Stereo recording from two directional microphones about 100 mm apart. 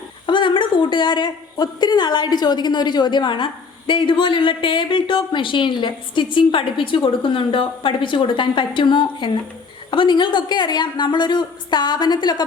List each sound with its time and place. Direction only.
0.3 s a woman's voice: 55° left (ahead or behind)